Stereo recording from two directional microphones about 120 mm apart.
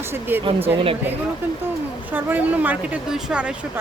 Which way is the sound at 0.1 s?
15° right (ahead or behind).